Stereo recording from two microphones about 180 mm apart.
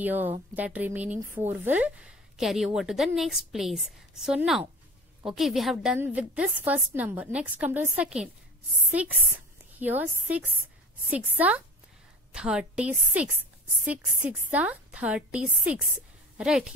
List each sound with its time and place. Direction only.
0.0 s a woman's voice: 10° right (ahead or behind)